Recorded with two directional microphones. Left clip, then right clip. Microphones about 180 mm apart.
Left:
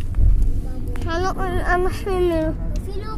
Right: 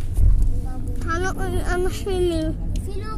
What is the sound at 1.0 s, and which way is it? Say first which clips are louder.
Child singing: left 2 dB; centre (ahead or behind).